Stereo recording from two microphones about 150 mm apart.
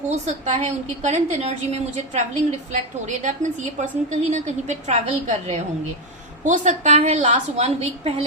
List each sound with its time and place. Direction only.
0.1 s a woman's voice: 50° right (ahead or behind)